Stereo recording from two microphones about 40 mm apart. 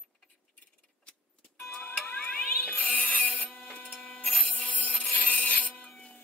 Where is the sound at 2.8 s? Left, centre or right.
Left.